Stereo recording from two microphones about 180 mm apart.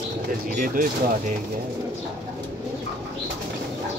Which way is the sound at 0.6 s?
45° right (ahead or behind).